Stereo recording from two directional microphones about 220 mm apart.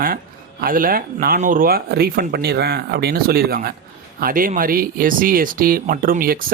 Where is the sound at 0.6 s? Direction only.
40° right (ahead or behind).